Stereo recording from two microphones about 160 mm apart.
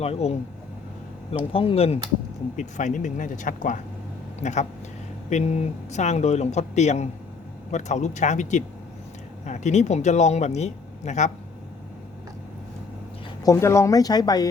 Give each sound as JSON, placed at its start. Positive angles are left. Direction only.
{"t": 0.0, "sound": "speech", "side_deg": 40}
{"t": 1.5, "sound": "speech", "side_deg": 35}
{"t": 2.6, "sound": "speech", "side_deg": 50}
{"t": 13.4, "sound": "speech", "side_deg": 20}